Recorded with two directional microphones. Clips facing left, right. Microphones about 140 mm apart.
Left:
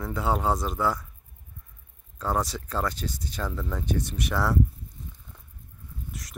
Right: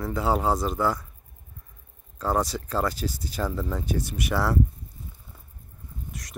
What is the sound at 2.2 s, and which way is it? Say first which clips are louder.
Speech: right 2 dB; centre (ahead or behind).